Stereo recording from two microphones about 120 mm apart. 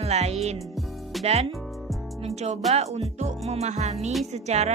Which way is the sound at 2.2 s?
65° right (ahead or behind).